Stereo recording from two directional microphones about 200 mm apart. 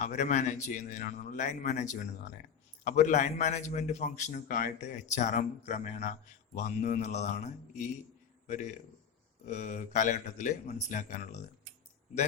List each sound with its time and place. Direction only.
0.0 s a man's voice: 35° left (ahead or behind)